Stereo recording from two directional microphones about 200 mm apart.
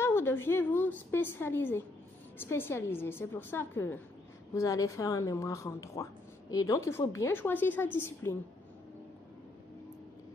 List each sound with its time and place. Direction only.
0.0 s a woman's voice: 10° left (ahead or behind)